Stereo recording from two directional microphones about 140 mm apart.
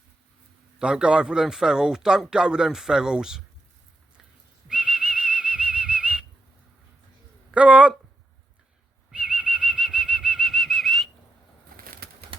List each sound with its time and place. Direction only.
0.8 s a man's voice: 5° right (ahead or behind)
4.7 s whistling: 5° right (ahead or behind)
7.5 s speech: 10° right (ahead or behind)
9.1 s whistling: 10° right (ahead or behind)
11.7 s bird: 90° right
12.3 s pigeon: 40° right (ahead or behind)